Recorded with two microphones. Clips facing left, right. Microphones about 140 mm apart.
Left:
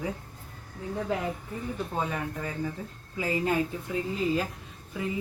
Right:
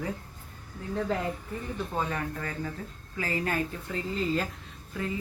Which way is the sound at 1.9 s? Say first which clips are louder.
Right 1 dB; 15° left (ahead or behind).